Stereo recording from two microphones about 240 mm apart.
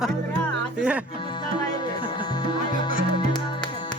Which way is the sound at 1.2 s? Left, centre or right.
Centre.